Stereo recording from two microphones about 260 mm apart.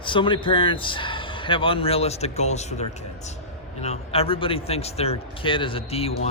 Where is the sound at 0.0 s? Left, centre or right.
Centre.